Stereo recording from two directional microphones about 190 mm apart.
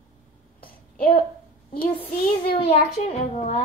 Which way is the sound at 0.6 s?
50° left (ahead or behind).